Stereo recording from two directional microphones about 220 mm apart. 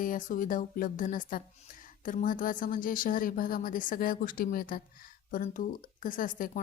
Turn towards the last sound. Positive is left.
turn(degrees=40)  # may be behind; listen again after turning